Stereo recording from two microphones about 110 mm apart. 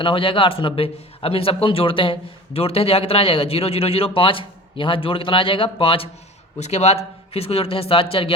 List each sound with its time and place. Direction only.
0.0 s a man's voice: 50° left (ahead or behind)
6.6 s a man's voice: 85° left; by 8.3 s 55° left (ahead or behind)